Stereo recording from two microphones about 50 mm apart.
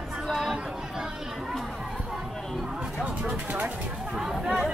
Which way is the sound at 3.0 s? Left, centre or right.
Right.